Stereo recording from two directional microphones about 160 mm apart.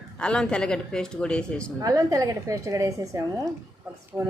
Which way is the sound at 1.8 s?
20° right (ahead or behind).